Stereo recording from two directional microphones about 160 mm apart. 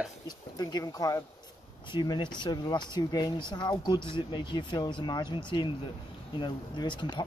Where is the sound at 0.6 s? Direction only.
25° left (ahead or behind).